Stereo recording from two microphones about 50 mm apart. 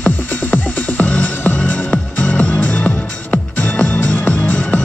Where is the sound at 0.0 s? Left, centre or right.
Left.